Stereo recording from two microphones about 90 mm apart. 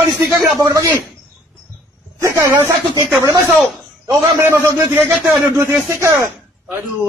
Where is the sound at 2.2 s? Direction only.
35° right (ahead or behind).